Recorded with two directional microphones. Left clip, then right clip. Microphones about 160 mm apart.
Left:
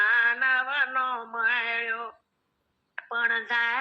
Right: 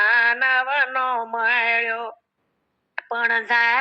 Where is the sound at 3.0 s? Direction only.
35° right (ahead or behind).